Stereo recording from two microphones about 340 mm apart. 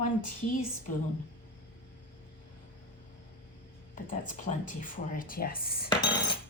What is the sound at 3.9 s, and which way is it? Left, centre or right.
Speech, left.